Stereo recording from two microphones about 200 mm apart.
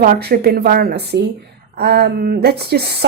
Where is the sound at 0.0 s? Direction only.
50° right (ahead or behind).